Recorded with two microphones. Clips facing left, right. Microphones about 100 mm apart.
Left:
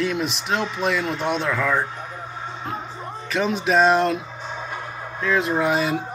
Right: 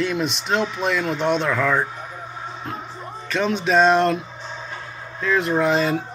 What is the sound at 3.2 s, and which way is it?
Speech, 5° left (ahead or behind).